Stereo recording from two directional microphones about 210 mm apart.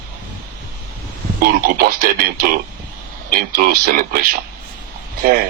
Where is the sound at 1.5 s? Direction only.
45° right (ahead or behind).